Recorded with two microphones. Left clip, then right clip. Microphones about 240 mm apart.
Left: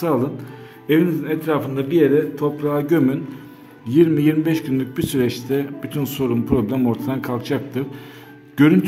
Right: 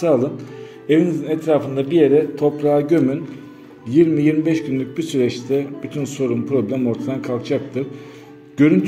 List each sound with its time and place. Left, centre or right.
0.0 s a man's voice: centre